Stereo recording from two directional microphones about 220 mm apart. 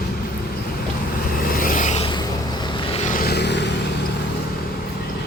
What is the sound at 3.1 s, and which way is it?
Vehicle, 45° left (ahead or behind).